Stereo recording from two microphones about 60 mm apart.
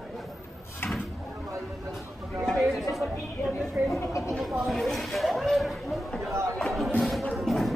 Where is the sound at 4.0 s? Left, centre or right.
Left.